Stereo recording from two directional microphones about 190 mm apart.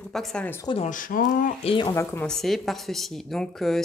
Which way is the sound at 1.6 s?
25° left (ahead or behind).